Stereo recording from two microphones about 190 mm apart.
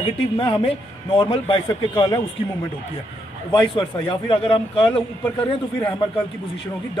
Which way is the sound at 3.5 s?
25° left (ahead or behind).